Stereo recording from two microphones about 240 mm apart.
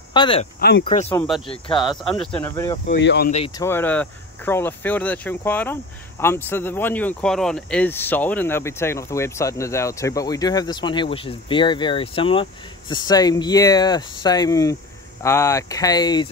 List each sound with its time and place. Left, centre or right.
0.1 s speech: left
0.6 s speech: left
1.0 s speech: centre
1.5 s speech: centre
2.0 s speech: centre
2.4 s speech: centre
3.0 s speech: left
3.3 s speech: left
3.5 s speech: centre